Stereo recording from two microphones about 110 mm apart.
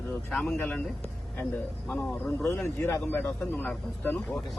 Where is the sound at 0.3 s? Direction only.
10° left (ahead or behind).